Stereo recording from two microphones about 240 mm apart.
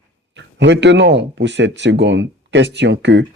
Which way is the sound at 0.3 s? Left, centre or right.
Right.